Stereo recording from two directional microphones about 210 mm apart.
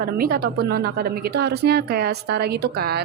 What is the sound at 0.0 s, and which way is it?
A woman's voice, 45° right (ahead or behind).